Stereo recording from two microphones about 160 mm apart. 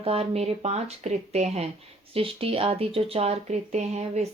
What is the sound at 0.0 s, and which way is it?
Speech, 40° right (ahead or behind).